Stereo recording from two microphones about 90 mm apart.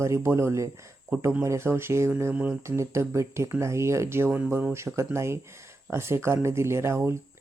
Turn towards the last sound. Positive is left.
turn(degrees=-30)  # may be behind; listen again after turning